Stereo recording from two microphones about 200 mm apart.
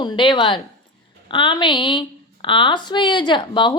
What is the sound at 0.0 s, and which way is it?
A woman's voice, 25° left (ahead or behind).